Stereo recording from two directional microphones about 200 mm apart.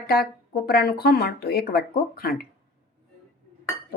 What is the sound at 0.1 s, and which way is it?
Speech, 50° left (ahead or behind).